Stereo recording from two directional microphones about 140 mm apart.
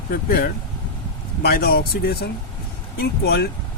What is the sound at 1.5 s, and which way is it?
Speech, 90° left.